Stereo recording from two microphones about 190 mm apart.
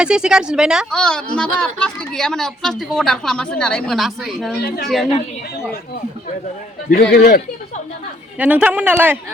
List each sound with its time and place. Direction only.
0.0 s speech: 5° right (ahead or behind)
6.9 s speech: 60° left (ahead or behind)
8.4 s a man's voice: 10° right (ahead or behind)